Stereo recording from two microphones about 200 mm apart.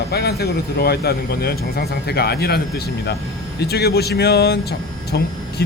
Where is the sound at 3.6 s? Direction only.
55° left (ahead or behind).